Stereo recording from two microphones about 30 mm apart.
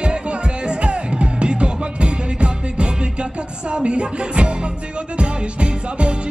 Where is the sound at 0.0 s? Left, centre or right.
Right.